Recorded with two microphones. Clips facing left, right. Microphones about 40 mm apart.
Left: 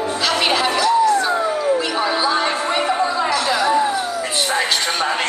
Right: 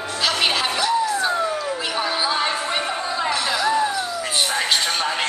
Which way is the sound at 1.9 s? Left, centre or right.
Centre.